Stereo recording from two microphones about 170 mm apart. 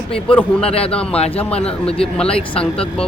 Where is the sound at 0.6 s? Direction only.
35° left (ahead or behind).